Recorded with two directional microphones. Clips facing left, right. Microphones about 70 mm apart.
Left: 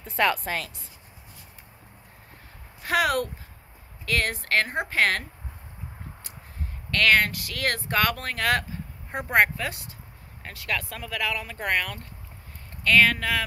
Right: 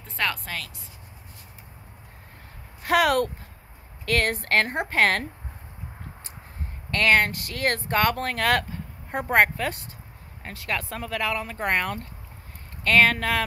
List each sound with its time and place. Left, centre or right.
0.0 s speech: centre
2.9 s speech: right
6.9 s speech: right